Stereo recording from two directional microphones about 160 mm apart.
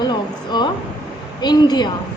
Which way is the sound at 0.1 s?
25° left (ahead or behind).